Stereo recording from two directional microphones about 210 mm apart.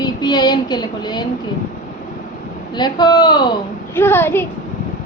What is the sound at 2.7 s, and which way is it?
Speech, 20° left (ahead or behind).